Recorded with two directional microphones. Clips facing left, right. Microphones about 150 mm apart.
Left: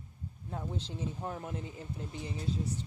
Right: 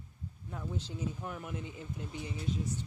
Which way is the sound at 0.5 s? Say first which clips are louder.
Left 1 dB; 30° left (ahead or behind).